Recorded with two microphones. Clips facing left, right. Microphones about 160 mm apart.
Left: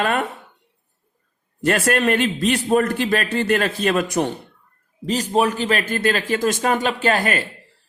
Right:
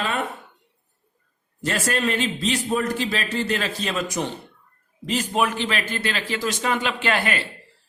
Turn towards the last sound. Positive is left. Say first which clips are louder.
# left 4 dB
turn(degrees=45)  # may be behind; listen again after turning